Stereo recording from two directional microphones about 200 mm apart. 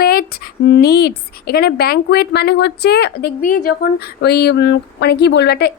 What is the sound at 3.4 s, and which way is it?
A woman's voice, 40° left (ahead or behind).